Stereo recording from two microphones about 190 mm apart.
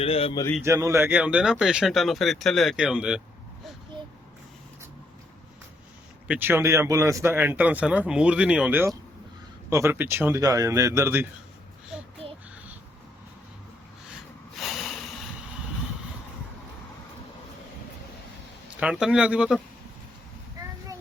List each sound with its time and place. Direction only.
0.0 s a man's voice: 30° left (ahead or behind)
0.6 s speech: 15° right (ahead or behind)
6.2 s speech: 10° right (ahead or behind)
11.9 s child singing: 5° right (ahead or behind)
14.6 s snort: centre (ahead or behind)
18.8 s speech: 5° right (ahead or behind)